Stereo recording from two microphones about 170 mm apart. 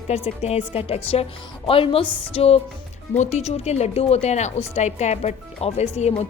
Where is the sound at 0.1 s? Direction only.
40° left (ahead or behind).